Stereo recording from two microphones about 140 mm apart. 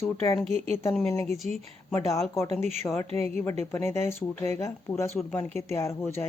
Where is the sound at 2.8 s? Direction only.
20° left (ahead or behind).